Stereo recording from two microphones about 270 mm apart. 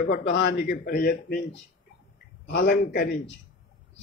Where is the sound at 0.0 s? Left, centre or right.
Left.